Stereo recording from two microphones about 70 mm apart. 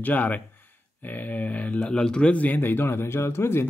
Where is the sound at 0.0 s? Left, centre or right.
Left.